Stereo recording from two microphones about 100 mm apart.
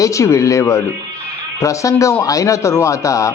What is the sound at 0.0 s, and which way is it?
Speech, 30° left (ahead or behind).